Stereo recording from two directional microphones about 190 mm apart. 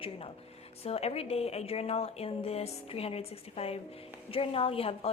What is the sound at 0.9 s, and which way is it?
A woman's voice, 30° left (ahead or behind).